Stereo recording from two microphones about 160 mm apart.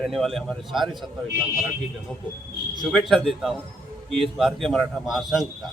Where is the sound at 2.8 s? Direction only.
Centre (ahead or behind).